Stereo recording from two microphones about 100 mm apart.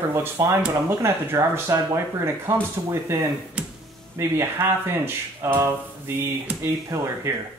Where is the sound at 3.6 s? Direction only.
15° right (ahead or behind).